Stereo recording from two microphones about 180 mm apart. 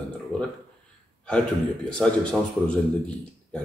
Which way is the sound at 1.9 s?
5° left (ahead or behind).